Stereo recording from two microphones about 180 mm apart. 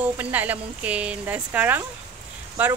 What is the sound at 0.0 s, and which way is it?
Speech, 10° right (ahead or behind).